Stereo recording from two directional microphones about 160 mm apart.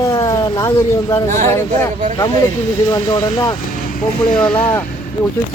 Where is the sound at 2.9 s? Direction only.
25° left (ahead or behind).